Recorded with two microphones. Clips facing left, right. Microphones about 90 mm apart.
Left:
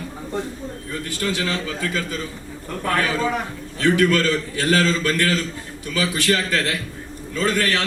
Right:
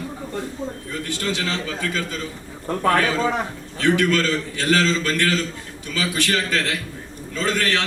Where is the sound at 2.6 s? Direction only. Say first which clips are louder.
Right 3 dB; 30° right (ahead or behind).